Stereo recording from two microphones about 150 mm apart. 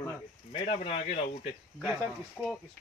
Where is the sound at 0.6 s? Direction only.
40° left (ahead or behind).